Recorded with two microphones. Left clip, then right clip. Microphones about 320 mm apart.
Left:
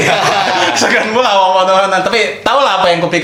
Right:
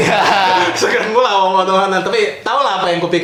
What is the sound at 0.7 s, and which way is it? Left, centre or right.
A man's voice, left.